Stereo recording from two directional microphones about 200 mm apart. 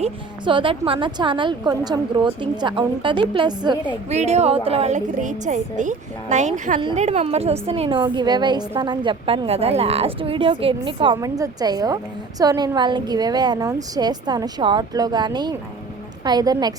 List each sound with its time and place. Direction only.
0.0 s a woman's voice: 25° right (ahead or behind)
4.1 s a woman's voice: 35° right (ahead or behind)